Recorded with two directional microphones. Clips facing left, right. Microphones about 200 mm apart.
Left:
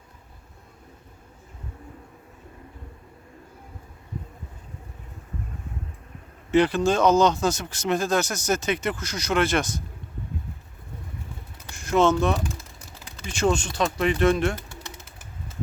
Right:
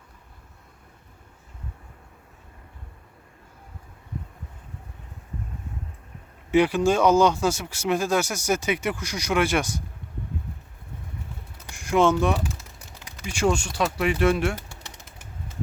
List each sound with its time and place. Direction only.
6.5 s speech: 10° right (ahead or behind)
11.7 s speech: 15° right (ahead or behind)